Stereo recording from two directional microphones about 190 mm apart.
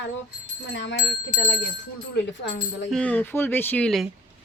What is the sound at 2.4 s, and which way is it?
Speech, 65° left (ahead or behind).